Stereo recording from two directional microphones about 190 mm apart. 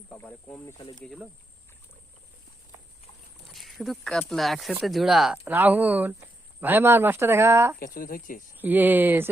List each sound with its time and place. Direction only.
0.1 s speech: 5° left (ahead or behind)
3.5 s speech: centre (ahead or behind)
7.9 s speech: 45° left (ahead or behind)
8.5 s speech: 10° right (ahead or behind)